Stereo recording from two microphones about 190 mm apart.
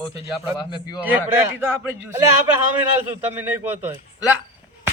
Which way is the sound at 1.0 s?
10° right (ahead or behind).